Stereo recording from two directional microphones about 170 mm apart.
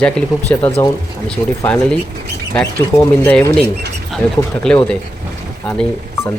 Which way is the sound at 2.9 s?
10° left (ahead or behind).